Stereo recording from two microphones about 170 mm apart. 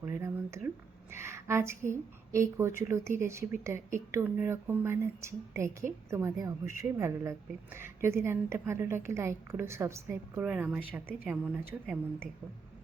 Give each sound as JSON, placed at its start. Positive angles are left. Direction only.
{"t": 0.0, "sound": "a sound", "side_deg": -15}
{"t": 1.1, "sound": "a woman's voice", "side_deg": -15}
{"t": 10.4, "sound": "a woman's voice", "side_deg": -5}